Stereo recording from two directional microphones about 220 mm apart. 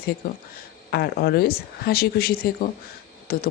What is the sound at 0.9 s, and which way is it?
Speech, 45° left (ahead or behind).